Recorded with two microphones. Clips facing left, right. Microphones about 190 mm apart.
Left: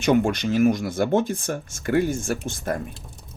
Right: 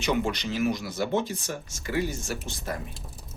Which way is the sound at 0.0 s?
50° left (ahead or behind).